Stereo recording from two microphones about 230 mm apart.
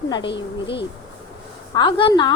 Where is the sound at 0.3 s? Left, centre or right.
Left.